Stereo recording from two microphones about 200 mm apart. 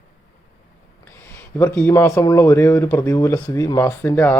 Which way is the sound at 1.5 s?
10° left (ahead or behind).